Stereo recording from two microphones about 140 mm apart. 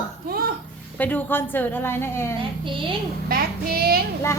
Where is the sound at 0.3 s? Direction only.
90° right.